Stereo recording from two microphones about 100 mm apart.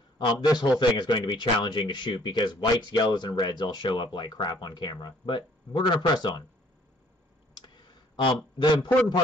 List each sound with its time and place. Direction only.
0.2 s a man's voice: 45° left (ahead or behind)
7.6 s clicking: 50° left (ahead or behind)
8.5 s a man's voice: 50° left (ahead or behind)